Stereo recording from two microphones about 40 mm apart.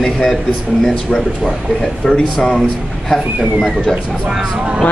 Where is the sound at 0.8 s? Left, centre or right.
Centre.